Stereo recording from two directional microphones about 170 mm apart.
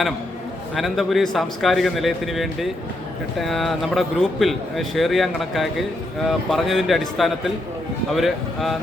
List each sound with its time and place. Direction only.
0.8 s speech: centre (ahead or behind)